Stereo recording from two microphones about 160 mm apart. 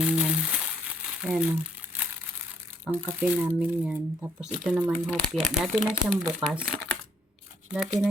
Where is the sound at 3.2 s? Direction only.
10° right (ahead or behind).